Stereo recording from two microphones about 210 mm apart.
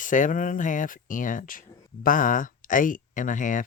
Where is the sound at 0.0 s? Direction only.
40° left (ahead or behind).